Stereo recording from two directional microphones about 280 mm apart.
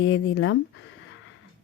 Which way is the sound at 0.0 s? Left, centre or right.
Left.